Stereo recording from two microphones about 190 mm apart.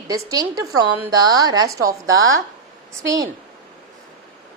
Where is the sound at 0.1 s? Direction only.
20° right (ahead or behind).